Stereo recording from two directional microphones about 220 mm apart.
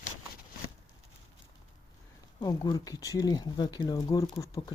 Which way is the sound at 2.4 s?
20° left (ahead or behind).